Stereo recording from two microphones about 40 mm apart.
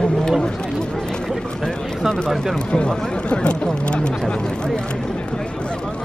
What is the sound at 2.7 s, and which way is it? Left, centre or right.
Speech, left.